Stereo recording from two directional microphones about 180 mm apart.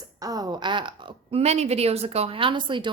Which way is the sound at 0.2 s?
20° right (ahead or behind).